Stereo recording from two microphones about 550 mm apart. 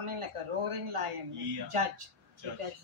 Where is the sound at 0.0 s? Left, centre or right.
Right.